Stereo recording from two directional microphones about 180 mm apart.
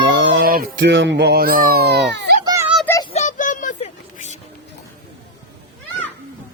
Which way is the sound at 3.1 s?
45° left (ahead or behind).